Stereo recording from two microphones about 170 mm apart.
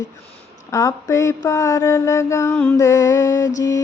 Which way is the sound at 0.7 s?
20° left (ahead or behind).